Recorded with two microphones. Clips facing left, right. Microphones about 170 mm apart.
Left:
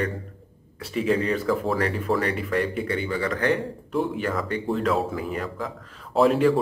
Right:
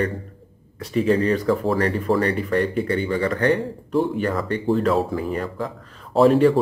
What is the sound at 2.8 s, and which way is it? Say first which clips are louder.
Speech: right 5 dB; 40° right (ahead or behind).